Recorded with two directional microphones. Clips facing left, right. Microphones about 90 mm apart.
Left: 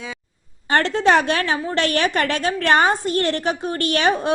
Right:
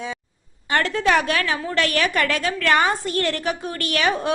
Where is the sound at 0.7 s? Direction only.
30° left (ahead or behind).